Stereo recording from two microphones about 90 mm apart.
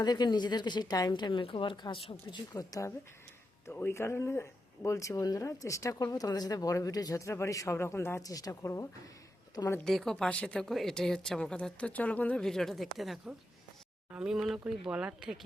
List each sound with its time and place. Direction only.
0.0 s a woman's voice: 50° left (ahead or behind)
2.5 s speech: 40° left (ahead or behind)
3.7 s speech: 25° left (ahead or behind)
8.2 s speech: 40° left (ahead or behind)
9.8 s speech: 5° left (ahead or behind)
12.4 s speech: 5° left (ahead or behind)